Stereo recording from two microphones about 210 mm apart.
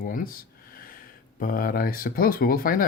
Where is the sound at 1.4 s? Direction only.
40° left (ahead or behind).